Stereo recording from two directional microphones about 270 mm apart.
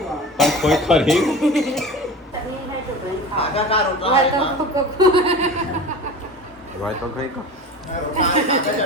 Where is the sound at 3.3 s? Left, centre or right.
Left.